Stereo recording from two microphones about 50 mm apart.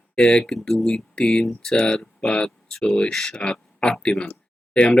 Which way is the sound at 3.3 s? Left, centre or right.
Centre.